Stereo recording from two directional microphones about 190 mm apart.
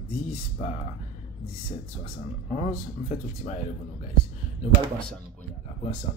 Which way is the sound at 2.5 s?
40° left (ahead or behind).